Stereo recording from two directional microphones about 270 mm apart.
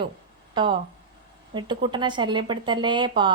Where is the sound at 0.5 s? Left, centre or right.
Centre.